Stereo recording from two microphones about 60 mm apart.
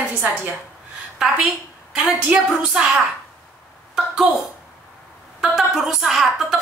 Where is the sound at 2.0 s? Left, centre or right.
Right.